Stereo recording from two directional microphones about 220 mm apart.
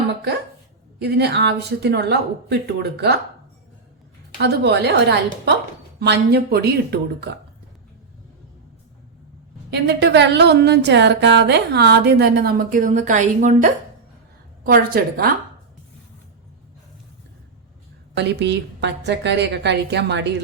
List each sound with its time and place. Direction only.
0.9 s a woman's voice: 50° right (ahead or behind)
4.4 s a woman's voice: 50° right (ahead or behind)
9.6 s a woman's voice: 50° right (ahead or behind)
18.2 s a woman's voice: 50° right (ahead or behind)